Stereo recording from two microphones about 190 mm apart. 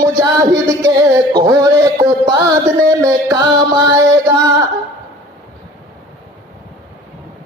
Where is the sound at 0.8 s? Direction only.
20° right (ahead or behind).